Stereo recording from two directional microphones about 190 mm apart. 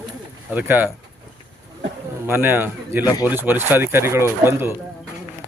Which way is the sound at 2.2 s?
10° right (ahead or behind).